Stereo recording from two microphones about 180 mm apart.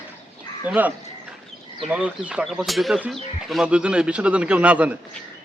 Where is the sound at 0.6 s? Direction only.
10° right (ahead or behind).